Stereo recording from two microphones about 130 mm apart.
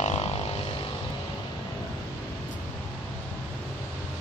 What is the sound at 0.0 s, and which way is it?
Vehicle, 55° left (ahead or behind).